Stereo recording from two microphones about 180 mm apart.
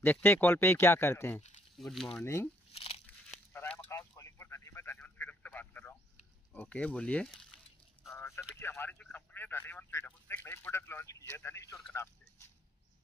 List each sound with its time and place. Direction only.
0.0 s a man's voice: 10° left (ahead or behind)
1.8 s a man's voice: centre (ahead or behind)
2.7 s crunch: 35° left (ahead or behind)
3.5 s a sound: 10° left (ahead or behind)
8.1 s a sound: 15° left (ahead or behind)
8.5 s a man's voice: 10° left (ahead or behind)